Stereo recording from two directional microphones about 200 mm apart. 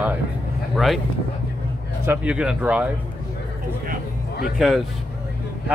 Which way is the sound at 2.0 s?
5° right (ahead or behind).